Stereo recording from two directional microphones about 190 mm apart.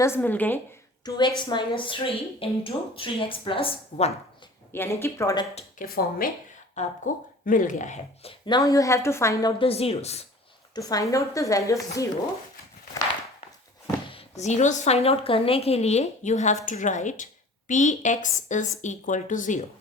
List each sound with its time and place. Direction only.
0.0 s a woman's voice: 10° left (ahead or behind)
1.0 s a woman's voice: 25° left (ahead or behind)
4.7 s a woman's voice: 10° left (ahead or behind)
5.8 s a woman's voice: 50° left (ahead or behind); by 9.5 s 15° left (ahead or behind)
9.6 s a woman's voice: 30° left (ahead or behind)
10.8 s a woman's voice: 20° left (ahead or behind)
14.1 s a woman's voice: 35° left (ahead or behind)